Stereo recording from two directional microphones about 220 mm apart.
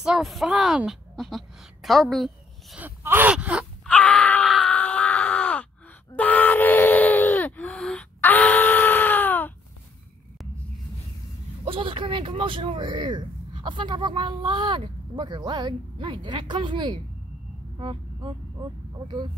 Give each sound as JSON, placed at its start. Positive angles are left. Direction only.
{"t": 0.0, "sound": "a woman's voice", "side_deg": 0}
{"t": 3.9, "sound": "groan", "side_deg": 5}
{"t": 6.1, "sound": "a sound", "side_deg": 5}
{"t": 11.6, "sound": "speech", "side_deg": -25}